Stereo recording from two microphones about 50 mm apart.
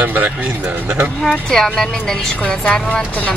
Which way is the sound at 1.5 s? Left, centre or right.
Centre.